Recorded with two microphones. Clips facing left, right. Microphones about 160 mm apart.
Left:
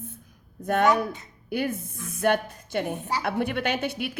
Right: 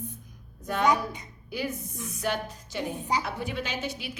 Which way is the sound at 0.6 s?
55° left (ahead or behind).